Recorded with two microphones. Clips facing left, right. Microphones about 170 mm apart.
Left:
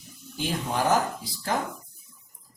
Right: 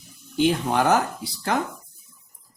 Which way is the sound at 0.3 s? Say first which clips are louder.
Right 8 dB; 70° right (ahead or behind).